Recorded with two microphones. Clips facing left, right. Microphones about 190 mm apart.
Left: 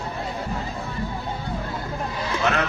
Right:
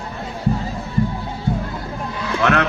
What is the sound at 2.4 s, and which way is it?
Music, 65° right (ahead or behind).